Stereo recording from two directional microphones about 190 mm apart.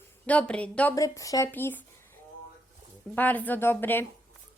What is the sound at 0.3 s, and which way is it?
Speech, 5° left (ahead or behind).